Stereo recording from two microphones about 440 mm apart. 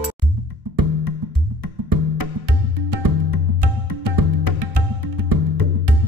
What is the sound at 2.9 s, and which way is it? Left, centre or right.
Music, right.